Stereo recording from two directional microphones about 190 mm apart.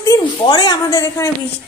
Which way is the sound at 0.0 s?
25° left (ahead or behind).